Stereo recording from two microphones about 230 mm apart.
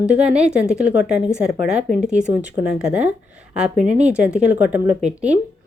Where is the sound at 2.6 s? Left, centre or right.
Centre.